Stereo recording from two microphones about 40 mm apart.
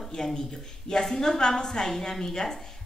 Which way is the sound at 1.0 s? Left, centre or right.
Centre.